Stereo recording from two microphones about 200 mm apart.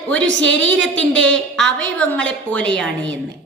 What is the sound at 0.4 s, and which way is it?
Speech, 70° right (ahead or behind).